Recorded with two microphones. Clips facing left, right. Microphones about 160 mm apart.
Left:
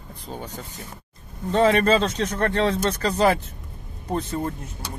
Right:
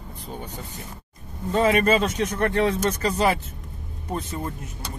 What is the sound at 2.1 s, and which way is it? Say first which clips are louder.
Speech: even; 20° right (ahead or behind).